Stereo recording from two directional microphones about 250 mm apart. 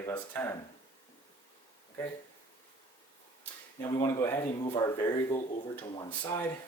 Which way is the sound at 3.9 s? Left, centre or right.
Centre.